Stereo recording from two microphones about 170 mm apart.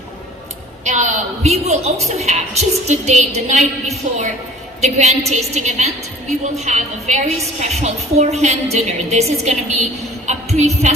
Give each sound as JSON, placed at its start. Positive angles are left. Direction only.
{"t": 0.9, "sound": "a woman's voice", "side_deg": -45}